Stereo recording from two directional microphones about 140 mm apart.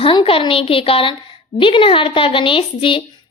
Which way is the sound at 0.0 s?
40° left (ahead or behind).